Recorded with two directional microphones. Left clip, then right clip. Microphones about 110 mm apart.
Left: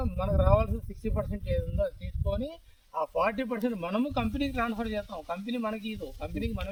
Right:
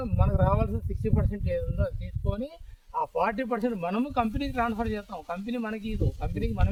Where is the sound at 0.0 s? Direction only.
15° right (ahead or behind).